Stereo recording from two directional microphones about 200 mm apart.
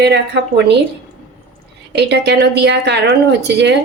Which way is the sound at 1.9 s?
60° right (ahead or behind).